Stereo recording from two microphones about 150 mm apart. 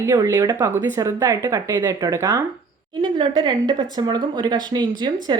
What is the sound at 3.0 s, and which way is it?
Speech, 30° right (ahead or behind).